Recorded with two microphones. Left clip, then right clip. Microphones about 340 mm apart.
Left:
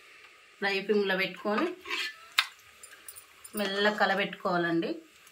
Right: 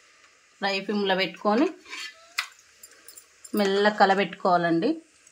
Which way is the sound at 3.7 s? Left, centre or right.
Right.